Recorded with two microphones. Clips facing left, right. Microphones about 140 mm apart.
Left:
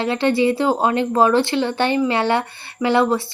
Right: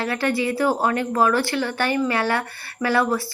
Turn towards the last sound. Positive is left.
turn(degrees=25)  # may be behind; listen again after turning